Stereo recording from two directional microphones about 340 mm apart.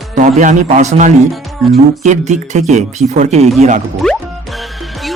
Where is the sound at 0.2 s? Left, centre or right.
Right.